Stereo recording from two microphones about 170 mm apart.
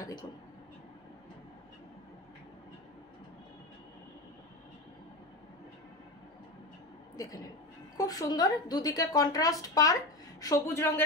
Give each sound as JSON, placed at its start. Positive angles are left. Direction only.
{"t": 0.0, "sound": "speech", "side_deg": 25}
{"t": 8.0, "sound": "a woman's voice", "side_deg": 20}